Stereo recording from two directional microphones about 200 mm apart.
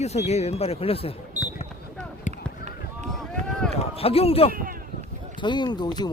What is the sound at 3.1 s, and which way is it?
Run, centre (ahead or behind).